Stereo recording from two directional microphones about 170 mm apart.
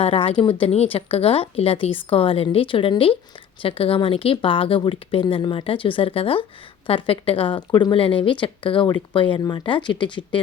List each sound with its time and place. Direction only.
0.0 s speech: 35° left (ahead or behind)